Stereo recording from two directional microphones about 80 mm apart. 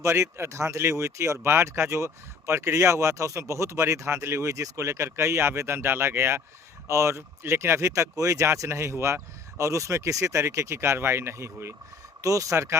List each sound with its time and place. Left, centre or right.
0.0 s speech: right
12.2 s speech: right